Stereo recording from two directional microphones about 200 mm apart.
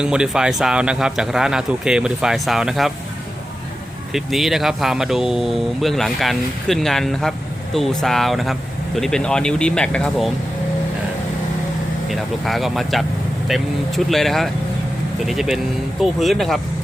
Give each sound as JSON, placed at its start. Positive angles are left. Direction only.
{"t": 0.0, "sound": "speech", "side_deg": -5}
{"t": 4.1, "sound": "speech", "side_deg": 0}
{"t": 12.0, "sound": "speech", "side_deg": 0}